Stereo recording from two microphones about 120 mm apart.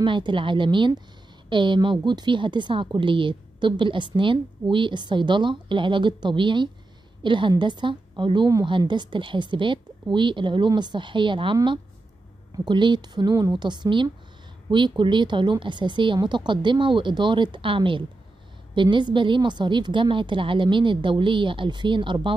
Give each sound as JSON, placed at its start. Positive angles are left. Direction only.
{"t": 0.0, "sound": "a woman's voice", "side_deg": -40}